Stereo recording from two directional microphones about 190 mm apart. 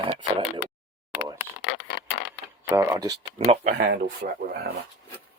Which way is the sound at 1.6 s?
60° left (ahead or behind).